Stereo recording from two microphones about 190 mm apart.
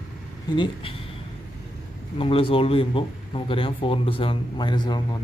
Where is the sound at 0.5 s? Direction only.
25° left (ahead or behind).